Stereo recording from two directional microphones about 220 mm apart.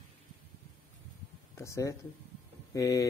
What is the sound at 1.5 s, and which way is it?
Speech, 15° left (ahead or behind).